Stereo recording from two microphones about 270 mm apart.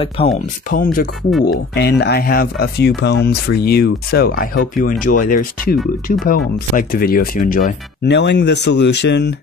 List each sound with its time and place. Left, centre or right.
0.2 s speech: left
0.7 s speech: left